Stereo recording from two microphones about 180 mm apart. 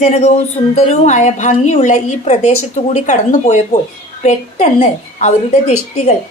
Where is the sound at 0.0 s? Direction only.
40° left (ahead or behind).